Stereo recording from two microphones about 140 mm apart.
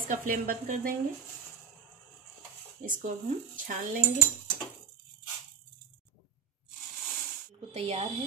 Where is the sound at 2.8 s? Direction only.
70° right (ahead or behind).